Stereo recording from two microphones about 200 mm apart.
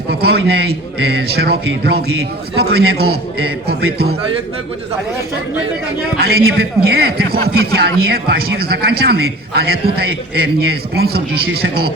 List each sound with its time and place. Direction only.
0.1 s a man's voice: 55° right (ahead or behind)
6.1 s a man's voice: 50° right (ahead or behind)